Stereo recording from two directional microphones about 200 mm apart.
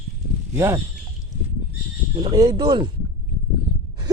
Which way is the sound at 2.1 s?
25° right (ahead or behind).